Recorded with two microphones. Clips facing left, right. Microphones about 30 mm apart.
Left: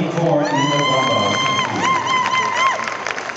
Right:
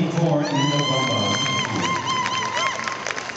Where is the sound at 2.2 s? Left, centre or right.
Left.